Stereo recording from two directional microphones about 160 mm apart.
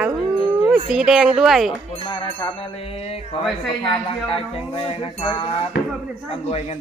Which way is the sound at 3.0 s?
40° left (ahead or behind).